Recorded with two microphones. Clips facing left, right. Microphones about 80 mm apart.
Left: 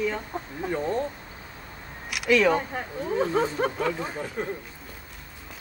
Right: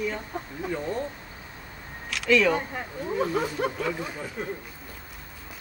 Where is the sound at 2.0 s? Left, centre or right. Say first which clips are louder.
Left 1 dB; centre.